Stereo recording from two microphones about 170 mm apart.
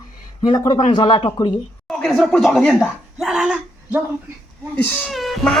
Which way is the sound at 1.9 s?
5° left (ahead or behind).